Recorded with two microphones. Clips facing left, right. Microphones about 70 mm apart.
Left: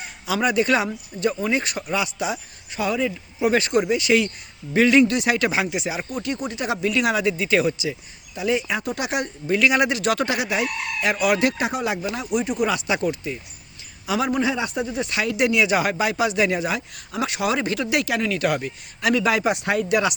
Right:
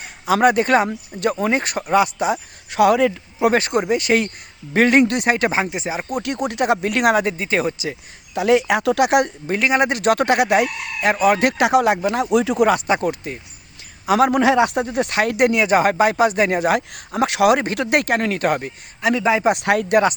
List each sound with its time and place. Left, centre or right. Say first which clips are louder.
0.3 s speech: right 5 dB; right
2.6 s speech: right 9 dB; right
3.4 s speech: right 2 dB; right
6.1 s speech: right 4 dB; right
8.4 s speech: right 7 dB; right
9.5 s speech: left 2 dB; right
11.4 s speech: right 7 dB; right
12.6 s speech: right 5 dB; right
14.1 s speech: right 7 dB; right
17.2 s speech: right 9 dB; right
17.6 s speech: right 3 dB; right
19.0 s a man's voice: right 2 dB; right
19.5 s speech: right 5 dB; right
19.9 s speech: right 5 dB; right